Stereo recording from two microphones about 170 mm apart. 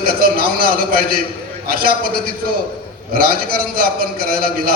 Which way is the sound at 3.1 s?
60° right (ahead or behind).